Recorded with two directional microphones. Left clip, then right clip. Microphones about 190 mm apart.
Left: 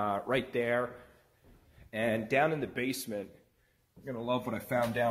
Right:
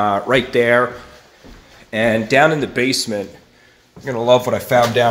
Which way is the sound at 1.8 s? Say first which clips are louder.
Right 15 dB; 5° left (ahead or behind).